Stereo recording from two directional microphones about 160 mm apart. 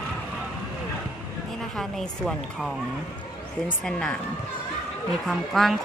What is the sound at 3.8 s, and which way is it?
Speech, 5° left (ahead or behind).